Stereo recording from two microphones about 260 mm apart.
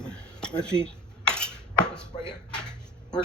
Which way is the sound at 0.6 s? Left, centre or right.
Centre.